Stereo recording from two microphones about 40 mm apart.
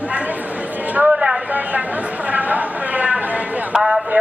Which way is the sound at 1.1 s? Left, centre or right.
Centre.